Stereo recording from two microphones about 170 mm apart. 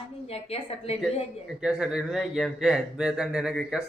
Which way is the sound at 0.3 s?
35° left (ahead or behind).